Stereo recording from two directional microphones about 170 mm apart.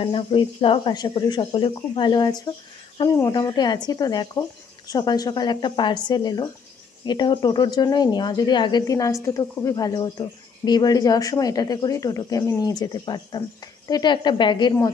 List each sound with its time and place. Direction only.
0.0 s speech: 30° left (ahead or behind)